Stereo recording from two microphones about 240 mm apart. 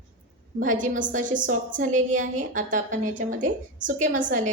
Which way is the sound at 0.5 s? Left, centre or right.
Right.